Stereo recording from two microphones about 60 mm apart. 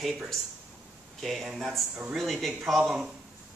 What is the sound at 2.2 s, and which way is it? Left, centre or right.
Speech, centre.